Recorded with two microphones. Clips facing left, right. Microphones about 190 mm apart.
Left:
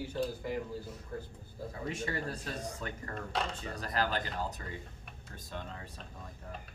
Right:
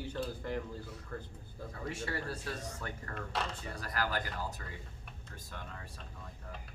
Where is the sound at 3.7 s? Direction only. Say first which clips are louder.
Left 3 dB; 25° left (ahead or behind).